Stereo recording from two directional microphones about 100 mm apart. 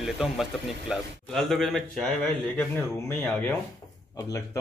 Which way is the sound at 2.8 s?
20° left (ahead or behind).